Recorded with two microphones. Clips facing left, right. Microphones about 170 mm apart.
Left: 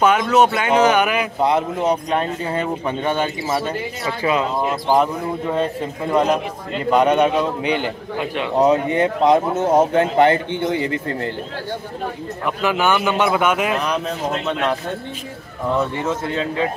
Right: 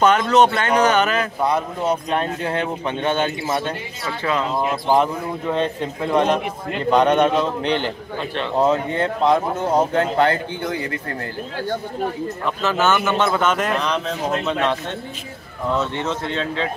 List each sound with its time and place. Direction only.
0.0 s a man's voice: 10° left (ahead or behind)
2.1 s a man's voice: 5° left (ahead or behind)
4.6 s a man's voice: centre (ahead or behind); by 11.1 s 25° left (ahead or behind)
12.4 s a man's voice: 15° left (ahead or behind)
16.1 s a man's voice: 10° left (ahead or behind)